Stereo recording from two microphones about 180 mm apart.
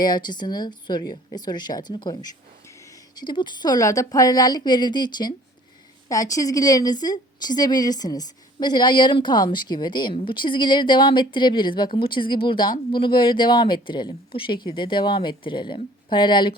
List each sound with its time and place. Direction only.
0.0 s a woman's voice: 25° left (ahead or behind)